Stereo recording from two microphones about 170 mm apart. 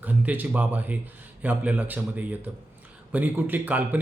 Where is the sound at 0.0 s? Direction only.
10° right (ahead or behind).